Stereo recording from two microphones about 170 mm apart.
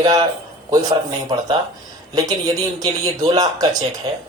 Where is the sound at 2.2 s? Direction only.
20° right (ahead or behind).